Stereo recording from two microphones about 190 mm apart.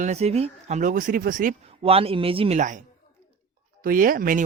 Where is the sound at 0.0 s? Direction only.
35° right (ahead or behind).